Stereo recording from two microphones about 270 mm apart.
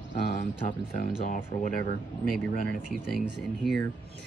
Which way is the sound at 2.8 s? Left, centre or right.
Centre.